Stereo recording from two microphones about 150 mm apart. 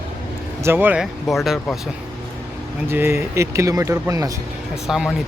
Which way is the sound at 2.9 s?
15° right (ahead or behind).